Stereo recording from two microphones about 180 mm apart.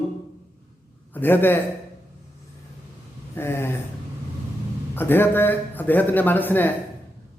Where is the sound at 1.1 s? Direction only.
10° left (ahead or behind).